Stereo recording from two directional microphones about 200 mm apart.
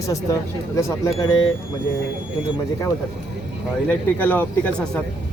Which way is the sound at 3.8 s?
10° left (ahead or behind).